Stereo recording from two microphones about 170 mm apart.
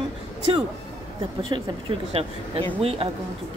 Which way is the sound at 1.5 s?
35° right (ahead or behind).